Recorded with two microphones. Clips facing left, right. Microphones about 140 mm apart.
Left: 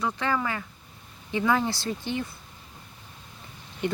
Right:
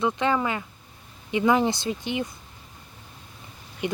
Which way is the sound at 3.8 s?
15° right (ahead or behind).